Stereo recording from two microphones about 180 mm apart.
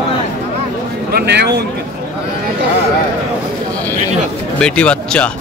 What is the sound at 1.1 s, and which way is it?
Speech, 70° right (ahead or behind).